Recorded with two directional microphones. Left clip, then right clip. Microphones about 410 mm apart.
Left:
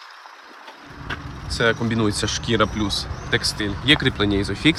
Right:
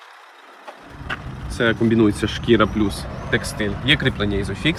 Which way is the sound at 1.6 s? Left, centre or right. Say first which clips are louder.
Right 3 dB; centre.